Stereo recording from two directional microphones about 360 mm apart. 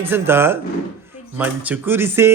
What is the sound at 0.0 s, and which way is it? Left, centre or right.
Speech, centre.